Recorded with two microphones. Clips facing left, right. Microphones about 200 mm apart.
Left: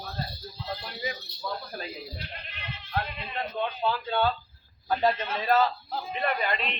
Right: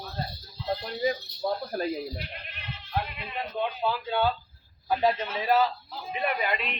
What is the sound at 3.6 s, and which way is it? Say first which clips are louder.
A man's voice: even; 5° right (ahead or behind).